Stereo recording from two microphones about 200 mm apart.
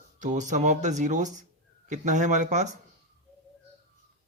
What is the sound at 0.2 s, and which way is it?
Speech, 40° right (ahead or behind).